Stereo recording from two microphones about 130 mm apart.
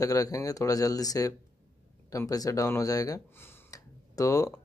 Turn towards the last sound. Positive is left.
turn(degrees=25)  # may be behind; listen again after turning